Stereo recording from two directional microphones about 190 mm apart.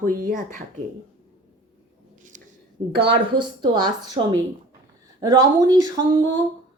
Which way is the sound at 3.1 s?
25° right (ahead or behind).